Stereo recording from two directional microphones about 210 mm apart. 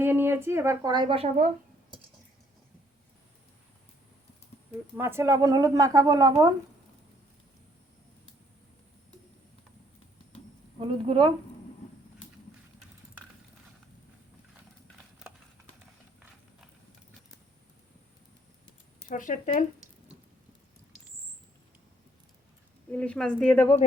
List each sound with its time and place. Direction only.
0.0 s speech: 10° right (ahead or behind); by 1.5 s 25° right (ahead or behind)
4.9 s speech: 10° right (ahead or behind)
10.8 s a woman's voice: 25° right (ahead or behind)
19.0 s speech: 40° left (ahead or behind)
22.9 s speech: 5° left (ahead or behind)